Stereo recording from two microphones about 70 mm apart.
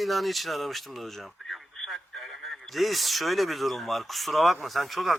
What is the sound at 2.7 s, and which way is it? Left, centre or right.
Speech, centre.